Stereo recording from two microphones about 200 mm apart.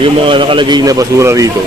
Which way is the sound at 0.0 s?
25° right (ahead or behind).